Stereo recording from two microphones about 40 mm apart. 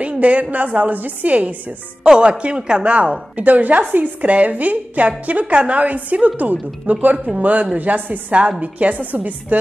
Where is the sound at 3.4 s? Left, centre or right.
Right.